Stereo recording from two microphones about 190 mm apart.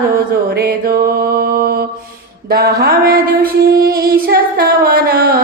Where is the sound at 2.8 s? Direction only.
50° right (ahead or behind).